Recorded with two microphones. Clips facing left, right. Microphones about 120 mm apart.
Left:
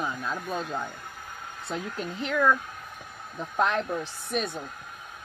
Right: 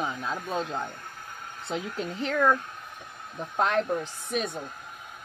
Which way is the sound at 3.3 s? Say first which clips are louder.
Right 1 dB; 20° right (ahead or behind).